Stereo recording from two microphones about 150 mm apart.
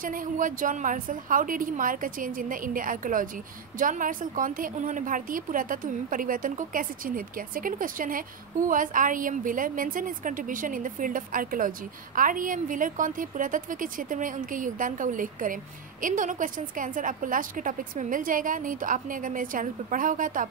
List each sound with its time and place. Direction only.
0.0 s a woman's voice: 65° right (ahead or behind)